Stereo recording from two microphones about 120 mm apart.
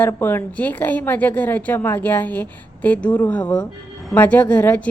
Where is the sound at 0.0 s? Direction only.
20° left (ahead or behind).